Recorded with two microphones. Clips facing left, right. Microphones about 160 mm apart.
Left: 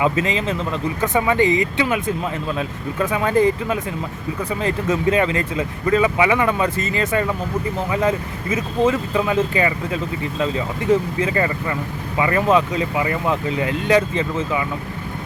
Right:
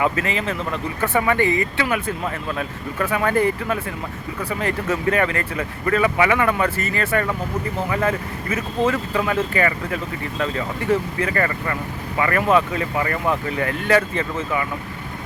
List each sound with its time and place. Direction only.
0.0 s speech: 20° left (ahead or behind)